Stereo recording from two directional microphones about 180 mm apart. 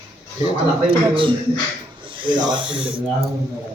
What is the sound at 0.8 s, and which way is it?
Speech, 30° right (ahead or behind).